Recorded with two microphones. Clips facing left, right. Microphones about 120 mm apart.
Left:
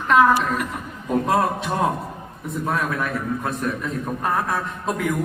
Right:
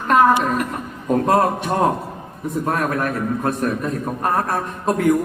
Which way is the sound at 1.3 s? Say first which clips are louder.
Right 4 dB; 45° right (ahead or behind).